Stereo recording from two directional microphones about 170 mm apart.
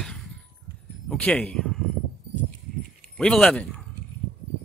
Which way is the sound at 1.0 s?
5° left (ahead or behind).